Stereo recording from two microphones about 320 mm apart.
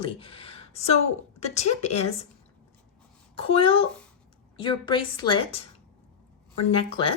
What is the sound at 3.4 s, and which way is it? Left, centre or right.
Speech, centre.